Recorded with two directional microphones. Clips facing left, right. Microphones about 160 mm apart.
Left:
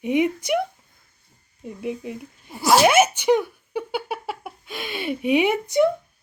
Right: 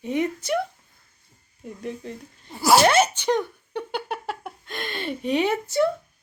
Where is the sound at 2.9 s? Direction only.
10° left (ahead or behind).